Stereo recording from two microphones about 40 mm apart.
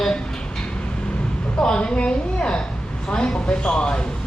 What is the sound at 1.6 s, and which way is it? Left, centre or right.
Speech, left.